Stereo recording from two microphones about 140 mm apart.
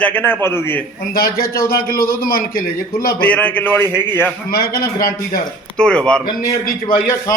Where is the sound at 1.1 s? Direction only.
90° left.